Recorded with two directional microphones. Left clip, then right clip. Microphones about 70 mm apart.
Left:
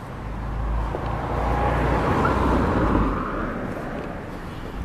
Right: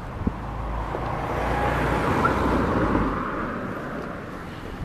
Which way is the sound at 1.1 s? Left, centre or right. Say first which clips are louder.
Even; right.